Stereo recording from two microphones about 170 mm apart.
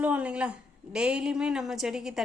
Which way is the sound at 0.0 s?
10° right (ahead or behind).